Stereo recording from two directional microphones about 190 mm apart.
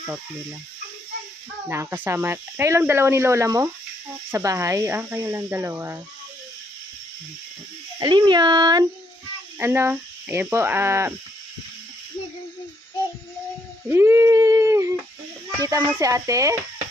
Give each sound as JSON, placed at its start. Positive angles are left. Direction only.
{"t": 1.7, "sound": "speech", "side_deg": -15}
{"t": 8.0, "sound": "speech", "side_deg": -25}
{"t": 13.8, "sound": "a sound", "side_deg": -10}
{"t": 15.6, "sound": "speech", "side_deg": -15}